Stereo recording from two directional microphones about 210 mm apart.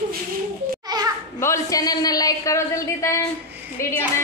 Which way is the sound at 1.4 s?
15° left (ahead or behind).